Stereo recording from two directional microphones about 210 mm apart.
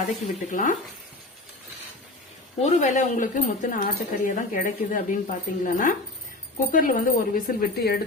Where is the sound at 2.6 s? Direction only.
35° left (ahead or behind).